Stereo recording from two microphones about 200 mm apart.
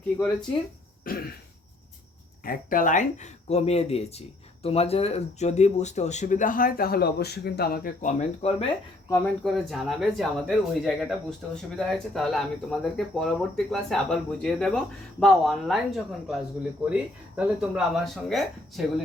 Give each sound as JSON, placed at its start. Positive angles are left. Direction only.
{"t": 2.4, "sound": "speech", "side_deg": 45}
{"t": 9.0, "sound": "speech", "side_deg": 15}
{"t": 9.4, "sound": "speech", "side_deg": 0}